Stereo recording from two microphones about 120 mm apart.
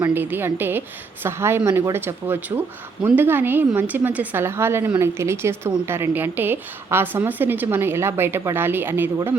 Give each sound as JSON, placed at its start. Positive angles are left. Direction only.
{"t": 0.0, "sound": "a woman's voice", "side_deg": -15}